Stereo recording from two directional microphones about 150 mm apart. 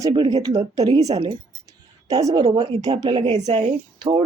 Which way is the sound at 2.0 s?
25° right (ahead or behind).